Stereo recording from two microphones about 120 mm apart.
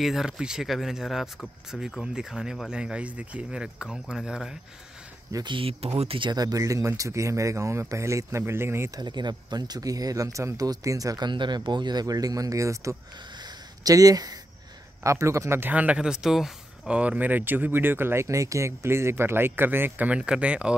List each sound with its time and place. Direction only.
0.0 s speech: 5° right (ahead or behind)
5.3 s speech: 40° right (ahead or behind); by 8.9 s 20° right (ahead or behind)
8.9 s speech: 35° right (ahead or behind); by 20.7 s 10° right (ahead or behind)